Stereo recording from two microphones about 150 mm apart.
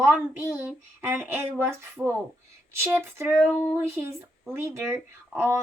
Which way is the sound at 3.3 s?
10° left (ahead or behind).